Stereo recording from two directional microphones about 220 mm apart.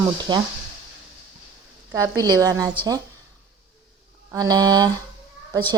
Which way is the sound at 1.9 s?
15° right (ahead or behind).